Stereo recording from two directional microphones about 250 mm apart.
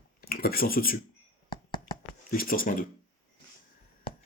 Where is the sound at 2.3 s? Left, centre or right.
Left.